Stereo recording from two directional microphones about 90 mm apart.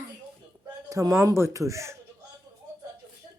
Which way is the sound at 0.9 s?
40° right (ahead or behind).